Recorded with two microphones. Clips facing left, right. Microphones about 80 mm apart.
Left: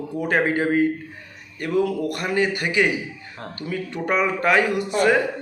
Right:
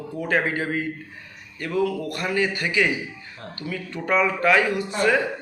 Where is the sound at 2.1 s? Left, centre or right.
Left.